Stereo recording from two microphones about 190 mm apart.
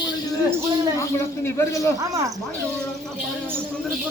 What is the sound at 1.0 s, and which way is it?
Speech, 15° left (ahead or behind).